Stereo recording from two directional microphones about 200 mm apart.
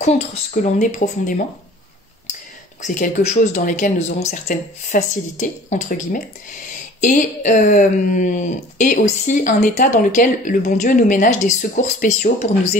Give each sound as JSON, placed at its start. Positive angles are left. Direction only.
{"t": 0.0, "sound": "speech", "side_deg": 35}
{"t": 2.8, "sound": "speech", "side_deg": 40}